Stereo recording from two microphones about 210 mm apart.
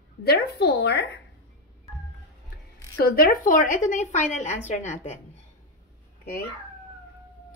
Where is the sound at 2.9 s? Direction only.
45° left (ahead or behind).